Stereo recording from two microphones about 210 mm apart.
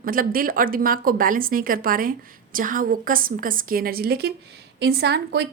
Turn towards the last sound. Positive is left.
turn(degrees=-50)  # may be behind; listen again after turning